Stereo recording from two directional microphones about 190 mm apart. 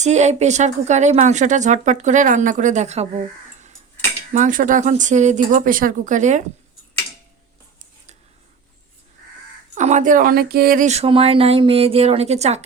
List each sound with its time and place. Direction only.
0.0 s a woman's voice: 35° right (ahead or behind)
4.4 s a woman's voice: 40° right (ahead or behind)
9.7 s a woman's voice: 40° right (ahead or behind)